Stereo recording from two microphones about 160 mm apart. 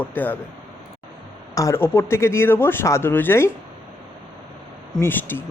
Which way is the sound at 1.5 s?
15° left (ahead or behind).